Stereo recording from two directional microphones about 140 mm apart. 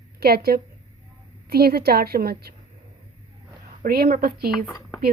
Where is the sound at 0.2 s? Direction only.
90° right.